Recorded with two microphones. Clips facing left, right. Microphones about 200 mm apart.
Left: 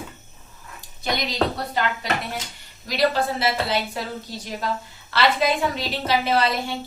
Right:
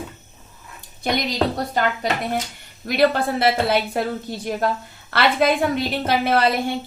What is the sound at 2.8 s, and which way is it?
A woman's voice, 55° right (ahead or behind).